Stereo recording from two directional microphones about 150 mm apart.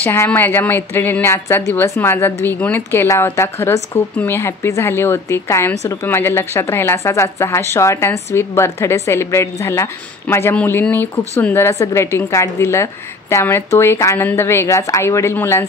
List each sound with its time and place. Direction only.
0.0 s a woman's voice: 15° left (ahead or behind)